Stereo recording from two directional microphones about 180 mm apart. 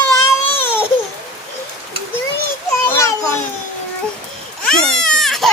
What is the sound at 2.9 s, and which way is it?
Babbling, 15° left (ahead or behind).